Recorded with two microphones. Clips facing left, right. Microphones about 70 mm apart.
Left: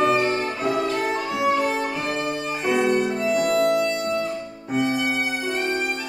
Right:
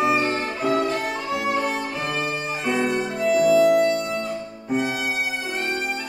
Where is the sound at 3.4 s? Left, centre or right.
Left.